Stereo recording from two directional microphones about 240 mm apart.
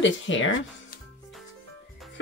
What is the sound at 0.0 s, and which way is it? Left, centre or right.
Speech, left.